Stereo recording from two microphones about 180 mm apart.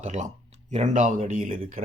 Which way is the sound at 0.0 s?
40° right (ahead or behind).